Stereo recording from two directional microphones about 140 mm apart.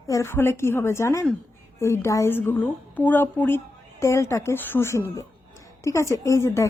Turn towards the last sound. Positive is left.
turn(degrees=20)  # may be behind; listen again after turning